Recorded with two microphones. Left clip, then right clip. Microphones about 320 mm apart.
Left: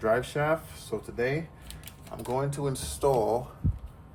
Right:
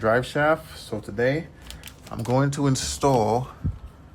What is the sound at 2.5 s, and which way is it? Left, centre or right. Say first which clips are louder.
Speech: right 7 dB; right.